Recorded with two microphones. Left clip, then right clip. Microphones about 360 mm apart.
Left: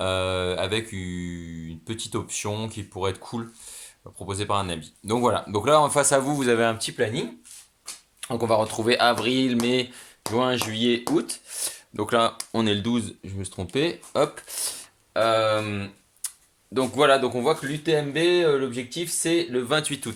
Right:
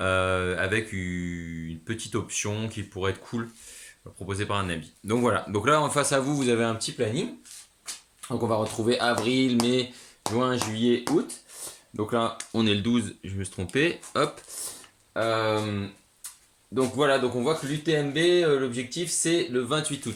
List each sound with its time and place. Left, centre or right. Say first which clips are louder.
0.0 s speech: even; centre
8.4 s speech: left 4 dB; left